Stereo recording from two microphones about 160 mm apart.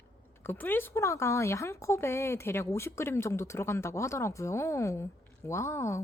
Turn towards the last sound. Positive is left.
turn(degrees=20)  # may be behind; listen again after turning